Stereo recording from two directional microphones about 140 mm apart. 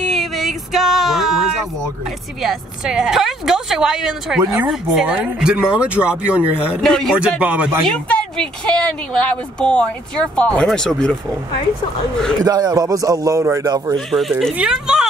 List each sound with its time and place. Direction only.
0.0 s a sound: centre (ahead or behind)
2.4 s speech: 5° right (ahead or behind)
6.8 s speech: 5° left (ahead or behind)
7.2 s speech: 10° right (ahead or behind)
8.1 s speech: 10° left (ahead or behind)
12.4 s a man's voice: 25° right (ahead or behind)
13.9 s speech: centre (ahead or behind)